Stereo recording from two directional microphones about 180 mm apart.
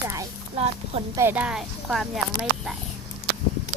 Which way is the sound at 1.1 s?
15° right (ahead or behind).